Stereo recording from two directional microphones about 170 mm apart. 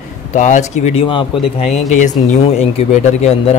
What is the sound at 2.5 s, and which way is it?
Speech, 40° left (ahead or behind).